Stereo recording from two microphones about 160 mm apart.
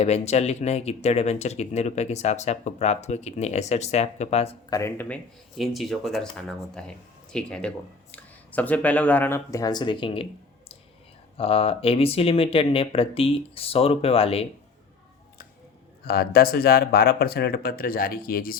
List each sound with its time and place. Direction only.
0.0 s speech: 45° left (ahead or behind)
4.7 s speech: 15° left (ahead or behind); by 10.2 s 30° left (ahead or behind)
11.3 s speech: 35° left (ahead or behind)
16.0 s speech: 75° left (ahead or behind)